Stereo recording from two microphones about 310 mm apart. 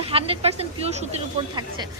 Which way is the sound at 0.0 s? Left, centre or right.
Centre.